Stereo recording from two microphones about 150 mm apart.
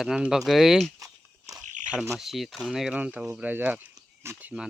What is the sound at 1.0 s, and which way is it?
Walk, 20° right (ahead or behind).